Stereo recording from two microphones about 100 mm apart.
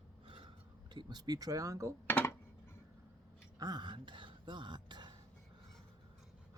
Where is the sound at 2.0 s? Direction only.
25° left (ahead or behind).